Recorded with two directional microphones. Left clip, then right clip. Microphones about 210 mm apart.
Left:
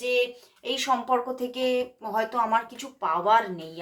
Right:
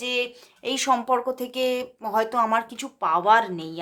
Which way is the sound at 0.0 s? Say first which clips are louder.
Left 1 dB; 40° right (ahead or behind).